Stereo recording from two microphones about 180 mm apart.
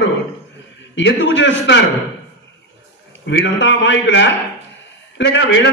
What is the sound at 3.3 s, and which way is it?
A man's voice, 90° left.